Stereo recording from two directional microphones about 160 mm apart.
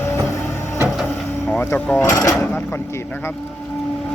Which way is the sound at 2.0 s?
20° left (ahead or behind).